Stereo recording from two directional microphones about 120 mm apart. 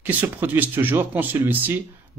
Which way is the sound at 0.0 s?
15° right (ahead or behind).